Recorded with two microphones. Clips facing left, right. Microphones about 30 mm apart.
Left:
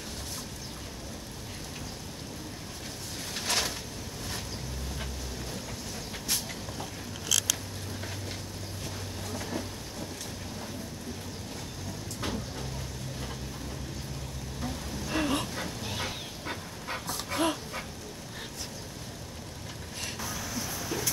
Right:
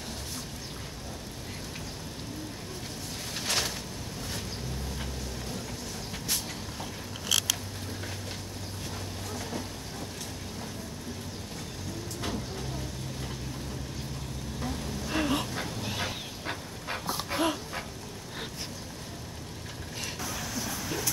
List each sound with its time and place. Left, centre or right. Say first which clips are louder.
3.3 s a sound: even; centre
6.2 s vehicle: even; centre
7.2 s mechanisms: right 2 dB; right
9.3 s boat: left 2 dB; centre
12.2 s vehicle: left 1 dB; centre
14.6 s vehicle: right 1 dB; centre
17.4 s dog: left 1 dB; centre
20.2 s a sound: right 1 dB; right